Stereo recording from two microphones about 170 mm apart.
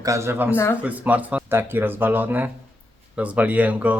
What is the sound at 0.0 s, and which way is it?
Speech, 15° right (ahead or behind).